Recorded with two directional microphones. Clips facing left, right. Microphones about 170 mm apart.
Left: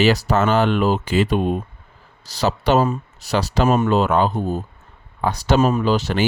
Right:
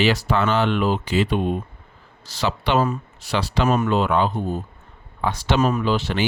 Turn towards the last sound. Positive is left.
turn(degrees=40)  # may be behind; listen again after turning